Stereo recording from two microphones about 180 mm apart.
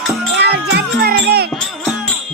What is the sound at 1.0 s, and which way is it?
Music, 60° right (ahead or behind).